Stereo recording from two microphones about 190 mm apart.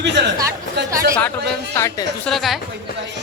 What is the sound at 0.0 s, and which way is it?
Chatter, 65° right (ahead or behind).